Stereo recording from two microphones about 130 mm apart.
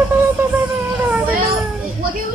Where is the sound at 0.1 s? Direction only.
15° right (ahead or behind).